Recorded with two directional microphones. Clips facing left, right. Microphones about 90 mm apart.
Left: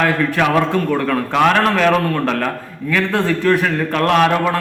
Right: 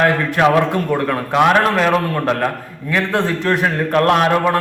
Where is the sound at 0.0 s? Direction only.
25° right (ahead or behind).